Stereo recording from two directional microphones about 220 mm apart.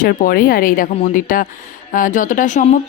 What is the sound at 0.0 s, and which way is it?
Speech, 45° left (ahead or behind).